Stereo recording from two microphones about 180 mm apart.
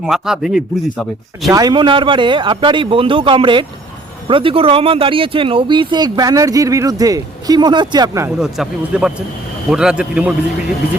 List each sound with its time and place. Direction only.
0.0 s speech: centre (ahead or behind)
1.5 s speech: 20° right (ahead or behind)
8.4 s speech: 5° right (ahead or behind)